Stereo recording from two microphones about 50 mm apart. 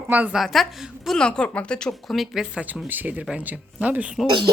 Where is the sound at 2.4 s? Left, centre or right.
Centre.